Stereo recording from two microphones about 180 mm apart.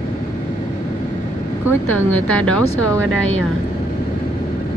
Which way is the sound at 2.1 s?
5° left (ahead or behind).